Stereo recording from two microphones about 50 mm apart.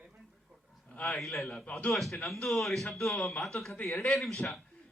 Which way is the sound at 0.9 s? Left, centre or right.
Left.